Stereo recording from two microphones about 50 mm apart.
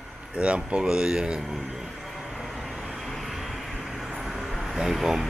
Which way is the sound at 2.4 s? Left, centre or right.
Centre.